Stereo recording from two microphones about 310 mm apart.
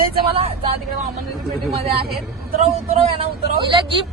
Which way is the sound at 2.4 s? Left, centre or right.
Right.